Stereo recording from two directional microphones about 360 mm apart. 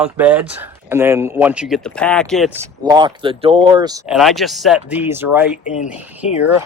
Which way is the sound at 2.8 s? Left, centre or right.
Centre.